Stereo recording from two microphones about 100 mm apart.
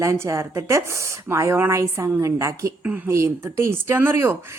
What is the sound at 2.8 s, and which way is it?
Speech, 15° right (ahead or behind).